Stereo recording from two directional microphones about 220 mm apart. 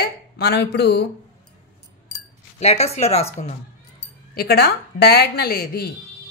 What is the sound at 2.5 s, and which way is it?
Speech, 30° left (ahead or behind).